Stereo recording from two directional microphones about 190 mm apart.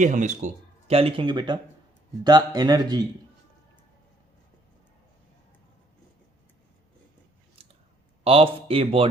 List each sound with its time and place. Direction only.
0.0 s speech: 40° right (ahead or behind); by 3.1 s 20° right (ahead or behind)
7.6 s clicking: 30° right (ahead or behind)
8.2 s speech: 30° right (ahead or behind)